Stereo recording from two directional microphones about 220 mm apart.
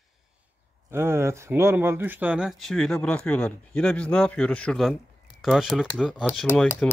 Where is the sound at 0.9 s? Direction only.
10° right (ahead or behind).